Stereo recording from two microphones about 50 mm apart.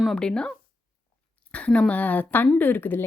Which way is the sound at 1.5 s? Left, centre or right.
Left.